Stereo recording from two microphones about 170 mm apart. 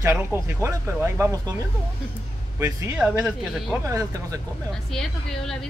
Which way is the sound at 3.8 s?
20° right (ahead or behind).